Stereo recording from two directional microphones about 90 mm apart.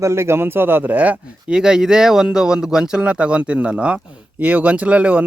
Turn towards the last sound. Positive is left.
turn(degrees=-15)  # may be behind; listen again after turning